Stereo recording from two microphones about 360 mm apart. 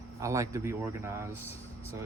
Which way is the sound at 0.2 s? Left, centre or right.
Centre.